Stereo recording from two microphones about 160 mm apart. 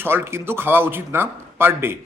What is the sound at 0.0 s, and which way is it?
A man's voice, 15° right (ahead or behind).